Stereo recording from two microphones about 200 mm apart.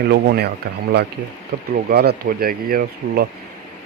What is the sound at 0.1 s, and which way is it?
Speech, 55° right (ahead or behind).